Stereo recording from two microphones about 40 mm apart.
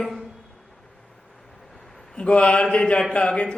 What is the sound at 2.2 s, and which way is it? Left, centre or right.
A man's voice, left.